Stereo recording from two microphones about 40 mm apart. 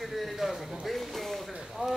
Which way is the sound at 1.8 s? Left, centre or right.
Right.